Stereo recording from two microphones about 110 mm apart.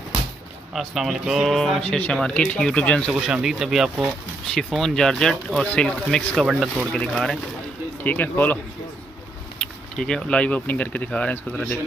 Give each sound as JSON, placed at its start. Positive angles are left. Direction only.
{"t": 0.7, "sound": "speech", "side_deg": -5}
{"t": 3.1, "sound": "speech", "side_deg": -5}
{"t": 8.0, "sound": "speech", "side_deg": 15}
{"t": 9.6, "sound": "speech", "side_deg": 5}